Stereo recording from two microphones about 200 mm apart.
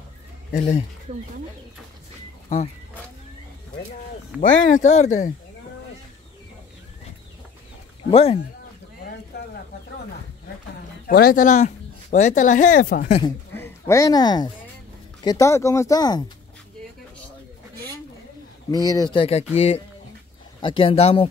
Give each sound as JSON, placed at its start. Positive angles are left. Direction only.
{"t": 0.5, "sound": "speech", "side_deg": 40}
{"t": 4.4, "sound": "speech", "side_deg": 40}
{"t": 8.1, "sound": "speech", "side_deg": 30}
{"t": 11.1, "sound": "speech", "side_deg": 50}
{"t": 13.2, "sound": "speech", "side_deg": 15}
{"t": 18.7, "sound": "speech", "side_deg": 20}